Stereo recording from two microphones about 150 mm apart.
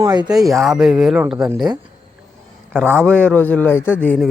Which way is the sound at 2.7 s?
15° right (ahead or behind).